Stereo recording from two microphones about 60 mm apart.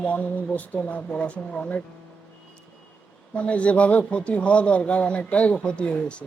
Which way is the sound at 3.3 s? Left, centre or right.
Left.